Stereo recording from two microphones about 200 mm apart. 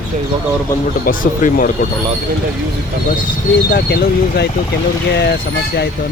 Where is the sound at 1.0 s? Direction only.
40° left (ahead or behind).